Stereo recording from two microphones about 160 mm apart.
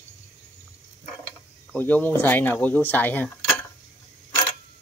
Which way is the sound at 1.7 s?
10° left (ahead or behind).